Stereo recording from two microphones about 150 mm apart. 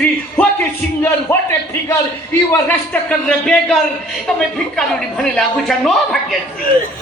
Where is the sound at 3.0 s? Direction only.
5° left (ahead or behind).